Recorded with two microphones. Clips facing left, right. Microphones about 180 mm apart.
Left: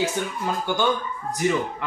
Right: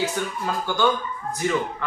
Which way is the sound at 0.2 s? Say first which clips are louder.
Even; 20° left (ahead or behind).